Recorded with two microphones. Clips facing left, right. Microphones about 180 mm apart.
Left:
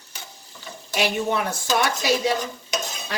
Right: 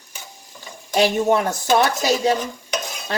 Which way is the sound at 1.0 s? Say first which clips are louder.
Right 6 dB; 45° right (ahead or behind).